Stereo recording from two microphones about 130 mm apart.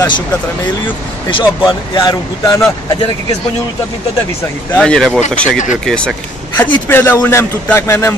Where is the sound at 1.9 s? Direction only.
25° left (ahead or behind).